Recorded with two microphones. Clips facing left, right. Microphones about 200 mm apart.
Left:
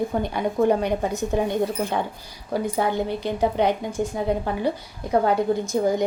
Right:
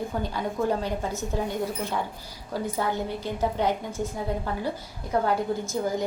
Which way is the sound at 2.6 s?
15° left (ahead or behind).